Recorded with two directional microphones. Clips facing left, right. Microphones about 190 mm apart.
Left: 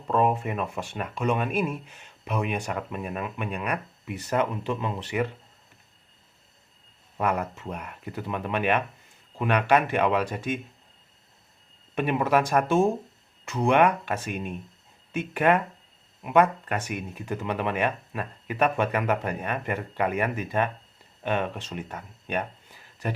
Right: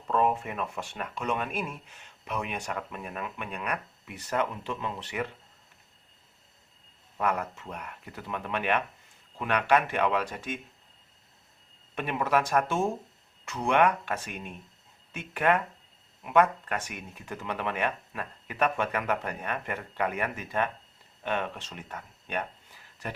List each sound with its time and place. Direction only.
0.1 s speech: 15° left (ahead or behind)
7.2 s speech: 15° left (ahead or behind)
11.9 s speech: 15° left (ahead or behind)